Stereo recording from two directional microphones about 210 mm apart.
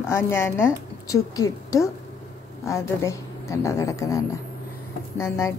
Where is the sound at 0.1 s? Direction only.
10° left (ahead or behind).